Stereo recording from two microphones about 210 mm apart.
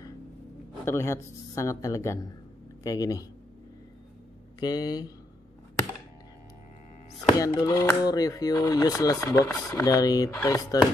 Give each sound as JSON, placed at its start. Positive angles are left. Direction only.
{"t": 0.8, "sound": "speech", "side_deg": 10}
{"t": 4.6, "sound": "speech", "side_deg": 20}
{"t": 7.3, "sound": "speech", "side_deg": 15}